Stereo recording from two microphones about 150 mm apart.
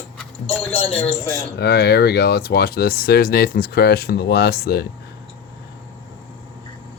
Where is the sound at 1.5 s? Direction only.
90° left.